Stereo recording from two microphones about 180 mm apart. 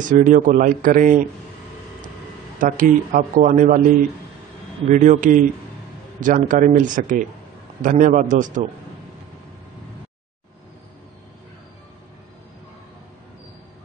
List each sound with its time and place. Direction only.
0.2 s speech: 45° right (ahead or behind)
2.6 s speech: 50° right (ahead or behind)
4.8 s speech: 45° right (ahead or behind)